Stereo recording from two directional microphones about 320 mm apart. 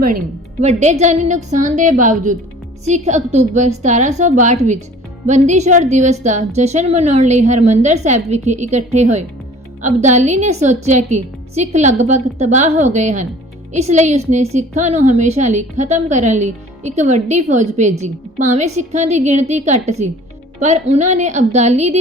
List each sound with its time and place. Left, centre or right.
0.6 s a woman's voice: right